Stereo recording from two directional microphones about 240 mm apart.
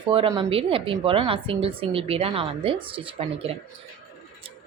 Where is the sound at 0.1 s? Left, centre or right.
Right.